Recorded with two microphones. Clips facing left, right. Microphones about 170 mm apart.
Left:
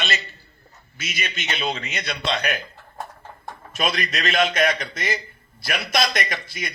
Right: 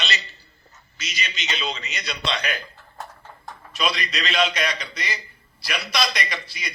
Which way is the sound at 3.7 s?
50° left (ahead or behind).